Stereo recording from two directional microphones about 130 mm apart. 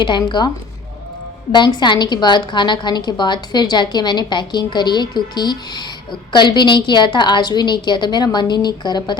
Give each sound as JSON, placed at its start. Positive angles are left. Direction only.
{"t": 0.0, "sound": "a woman's voice", "side_deg": 35}
{"t": 1.5, "sound": "a woman's voice", "side_deg": 35}